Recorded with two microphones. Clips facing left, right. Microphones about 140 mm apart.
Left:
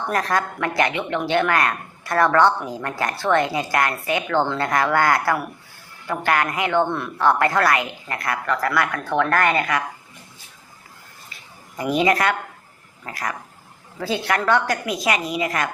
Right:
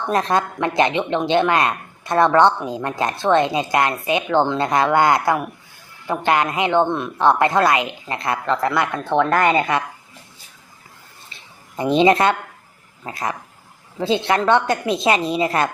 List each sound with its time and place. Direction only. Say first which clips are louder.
0.1 s a woman's voice: right 4 dB; 20° right (ahead or behind)
11.8 s a woman's voice: right 4 dB; 25° right (ahead or behind)